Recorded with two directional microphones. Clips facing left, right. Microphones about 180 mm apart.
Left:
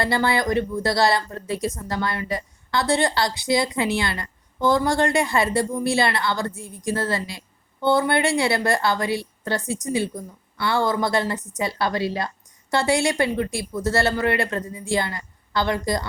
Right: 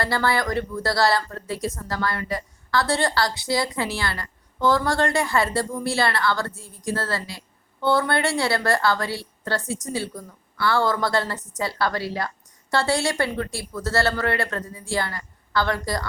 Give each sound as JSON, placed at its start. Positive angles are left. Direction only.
{"t": 0.0, "sound": "speech", "side_deg": 20}